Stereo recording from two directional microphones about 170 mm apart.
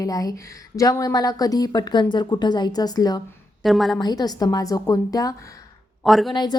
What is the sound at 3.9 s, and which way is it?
A woman's voice, 25° left (ahead or behind).